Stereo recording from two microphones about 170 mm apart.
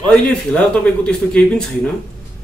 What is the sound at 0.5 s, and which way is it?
Speech, 5° left (ahead or behind).